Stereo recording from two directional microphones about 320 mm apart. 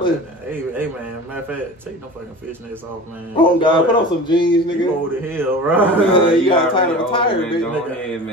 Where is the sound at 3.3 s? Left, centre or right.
Centre.